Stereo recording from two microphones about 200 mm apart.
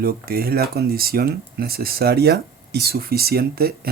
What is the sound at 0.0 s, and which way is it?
Speech, 50° right (ahead or behind).